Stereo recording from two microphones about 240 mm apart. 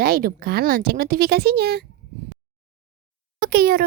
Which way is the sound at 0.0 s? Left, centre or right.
Right.